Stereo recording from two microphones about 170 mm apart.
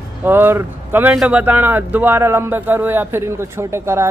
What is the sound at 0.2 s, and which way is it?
Speech, 10° right (ahead or behind).